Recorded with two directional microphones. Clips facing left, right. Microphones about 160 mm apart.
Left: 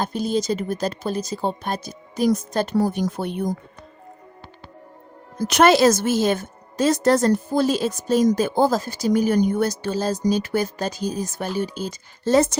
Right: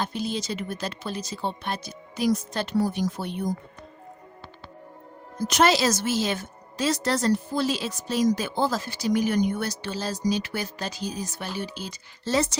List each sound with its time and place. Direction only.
0.0 s a woman's voice: 45° left (ahead or behind)
5.4 s a woman's voice: 65° left (ahead or behind); by 12.5 s 50° left (ahead or behind)